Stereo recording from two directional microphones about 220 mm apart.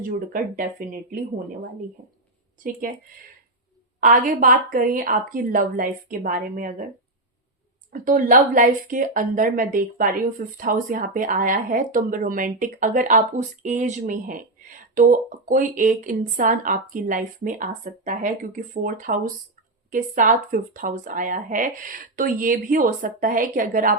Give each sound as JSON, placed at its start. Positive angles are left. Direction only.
{"t": 0.0, "sound": "speech", "side_deg": -40}
{"t": 2.0, "sound": "speech", "side_deg": -35}
{"t": 4.0, "sound": "speech", "side_deg": -40}
{"t": 7.9, "sound": "speech", "side_deg": -40}